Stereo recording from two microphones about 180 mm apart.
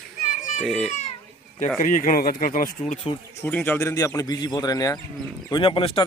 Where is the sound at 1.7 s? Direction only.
45° left (ahead or behind).